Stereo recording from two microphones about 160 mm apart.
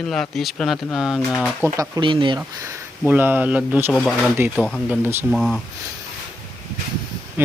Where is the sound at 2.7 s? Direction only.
10° right (ahead or behind).